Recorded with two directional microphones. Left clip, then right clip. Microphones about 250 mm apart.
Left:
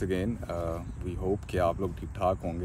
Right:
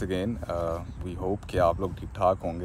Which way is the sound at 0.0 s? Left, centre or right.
Centre.